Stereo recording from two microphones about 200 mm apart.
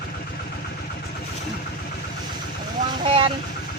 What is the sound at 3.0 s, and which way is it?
Vehicle, 25° right (ahead or behind).